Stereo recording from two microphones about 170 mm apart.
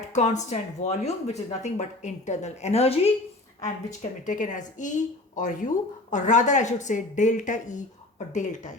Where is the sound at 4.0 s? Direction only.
50° left (ahead or behind).